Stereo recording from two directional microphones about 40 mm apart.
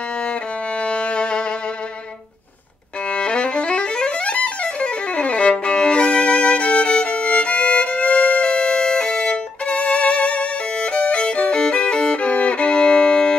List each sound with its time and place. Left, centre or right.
0.8 s music: left
3.1 s music: left
4.3 s violin: left